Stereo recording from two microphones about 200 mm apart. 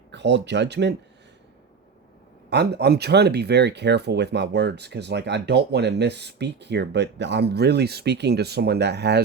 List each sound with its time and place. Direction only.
0.1 s speech: 60° right (ahead or behind)
2.5 s speech: 55° right (ahead or behind)